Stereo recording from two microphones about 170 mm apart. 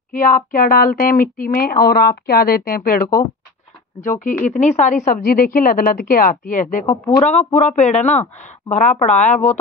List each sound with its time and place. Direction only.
0.1 s speech: 55° left (ahead or behind)
4.0 s speech: 50° left (ahead or behind)